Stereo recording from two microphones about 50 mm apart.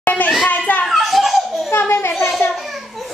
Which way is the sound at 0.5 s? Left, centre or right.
Left.